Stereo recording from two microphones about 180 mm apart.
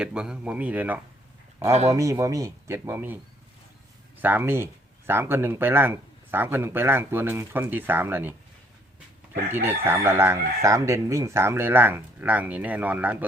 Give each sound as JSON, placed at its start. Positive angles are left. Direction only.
{"t": 0.0, "sound": "speech", "side_deg": -5}
{"t": 4.2, "sound": "speech", "side_deg": -10}
{"t": 9.5, "sound": "speech", "side_deg": -10}